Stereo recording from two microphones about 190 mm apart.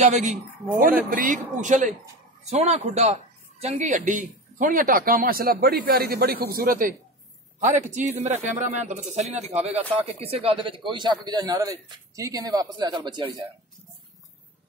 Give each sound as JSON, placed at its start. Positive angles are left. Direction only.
{"t": 0.0, "sound": "a woman's voice", "side_deg": -40}